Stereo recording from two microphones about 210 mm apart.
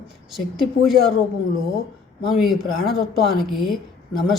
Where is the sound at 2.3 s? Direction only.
Centre (ahead or behind).